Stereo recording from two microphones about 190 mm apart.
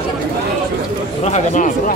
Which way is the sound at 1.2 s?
40° left (ahead or behind).